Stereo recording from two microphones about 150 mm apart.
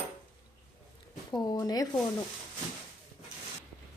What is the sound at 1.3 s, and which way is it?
Speech, 25° left (ahead or behind).